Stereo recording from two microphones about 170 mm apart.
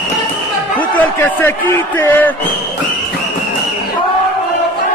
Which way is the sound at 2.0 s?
10° left (ahead or behind).